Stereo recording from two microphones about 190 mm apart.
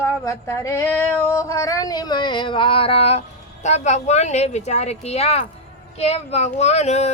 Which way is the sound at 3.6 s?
35° left (ahead or behind).